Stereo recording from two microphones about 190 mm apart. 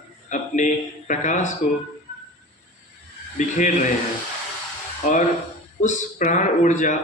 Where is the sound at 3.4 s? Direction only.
40° left (ahead or behind).